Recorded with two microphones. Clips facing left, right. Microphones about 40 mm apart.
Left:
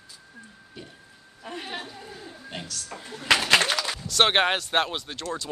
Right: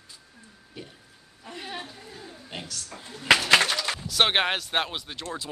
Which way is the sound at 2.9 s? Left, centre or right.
Left.